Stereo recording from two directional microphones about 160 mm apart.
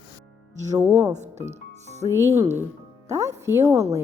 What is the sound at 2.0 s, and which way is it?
Speech, 15° right (ahead or behind).